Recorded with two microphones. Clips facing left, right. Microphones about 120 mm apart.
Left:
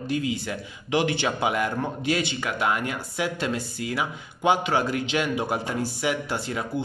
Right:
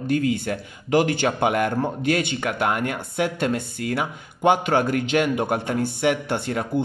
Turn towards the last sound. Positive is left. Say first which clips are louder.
# right 4 dB
turn(degrees=-55)  # may be behind; listen again after turning